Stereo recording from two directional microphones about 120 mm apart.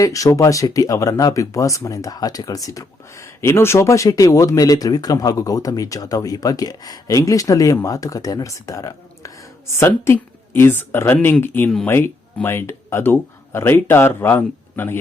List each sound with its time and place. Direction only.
0.0 s speech: 30° left (ahead or behind)